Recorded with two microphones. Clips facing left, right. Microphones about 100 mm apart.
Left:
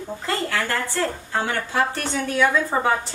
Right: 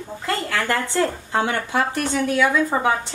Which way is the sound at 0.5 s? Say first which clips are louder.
Right 3 dB; 20° right (ahead or behind).